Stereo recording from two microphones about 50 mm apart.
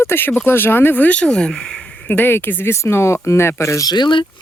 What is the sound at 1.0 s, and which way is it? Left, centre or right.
Speech, left.